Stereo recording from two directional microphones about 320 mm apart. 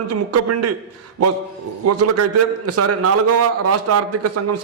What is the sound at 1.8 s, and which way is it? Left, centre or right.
A man's voice, right.